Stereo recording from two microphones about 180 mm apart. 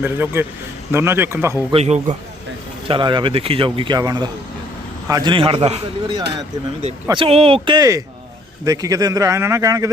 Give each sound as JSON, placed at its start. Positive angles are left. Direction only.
{"t": 0.0, "sound": "a man's voice", "side_deg": -10}
{"t": 1.7, "sound": "a man's voice", "side_deg": -35}
{"t": 7.1, "sound": "a man's voice", "side_deg": -30}